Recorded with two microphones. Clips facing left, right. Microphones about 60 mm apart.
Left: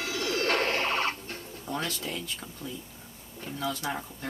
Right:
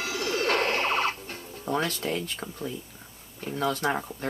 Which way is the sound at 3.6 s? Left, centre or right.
Right.